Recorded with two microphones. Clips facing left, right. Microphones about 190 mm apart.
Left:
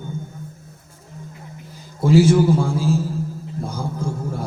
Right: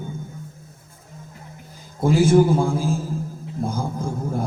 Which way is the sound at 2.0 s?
50° right (ahead or behind).